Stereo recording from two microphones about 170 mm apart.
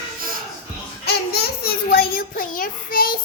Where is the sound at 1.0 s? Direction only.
70° left (ahead or behind).